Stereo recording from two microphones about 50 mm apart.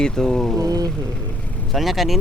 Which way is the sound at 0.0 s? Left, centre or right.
Centre.